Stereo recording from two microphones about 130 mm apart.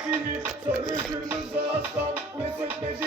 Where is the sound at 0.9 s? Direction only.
30° right (ahead or behind).